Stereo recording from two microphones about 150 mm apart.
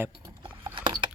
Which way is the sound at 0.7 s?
35° right (ahead or behind).